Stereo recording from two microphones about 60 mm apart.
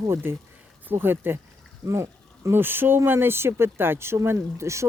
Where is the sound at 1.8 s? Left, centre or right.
Right.